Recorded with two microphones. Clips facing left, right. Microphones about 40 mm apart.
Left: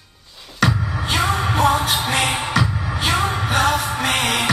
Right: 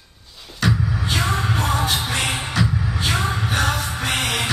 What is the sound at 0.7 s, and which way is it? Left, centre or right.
Music, left.